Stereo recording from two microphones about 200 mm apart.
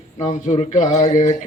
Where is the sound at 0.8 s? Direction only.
35° left (ahead or behind).